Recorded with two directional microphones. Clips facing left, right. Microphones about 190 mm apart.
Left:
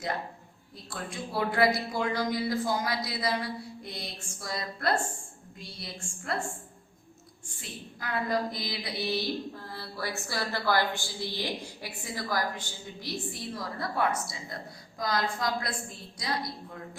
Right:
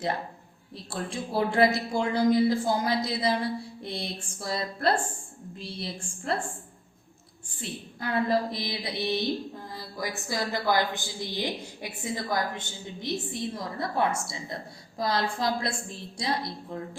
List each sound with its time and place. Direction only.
0.9 s a woman's voice: 30° right (ahead or behind)
8.0 s a woman's voice: 25° right (ahead or behind)